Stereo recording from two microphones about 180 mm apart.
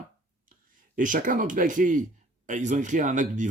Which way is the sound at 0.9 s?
45° right (ahead or behind).